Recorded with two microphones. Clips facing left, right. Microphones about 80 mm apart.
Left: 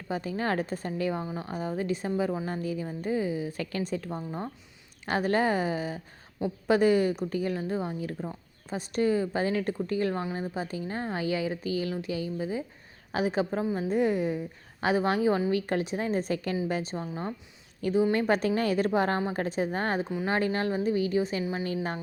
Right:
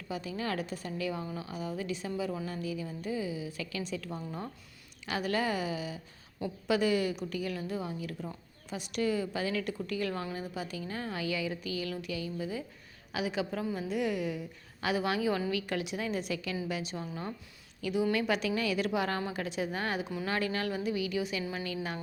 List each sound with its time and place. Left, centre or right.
0.1 s a woman's voice: left
5.0 s a woman's voice: left
17.0 s a woman's voice: left
18.0 s a woman's voice: left